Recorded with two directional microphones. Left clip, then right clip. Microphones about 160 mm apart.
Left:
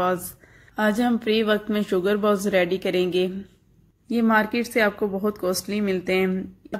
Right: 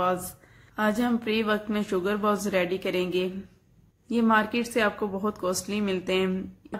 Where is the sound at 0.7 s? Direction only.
30° left (ahead or behind).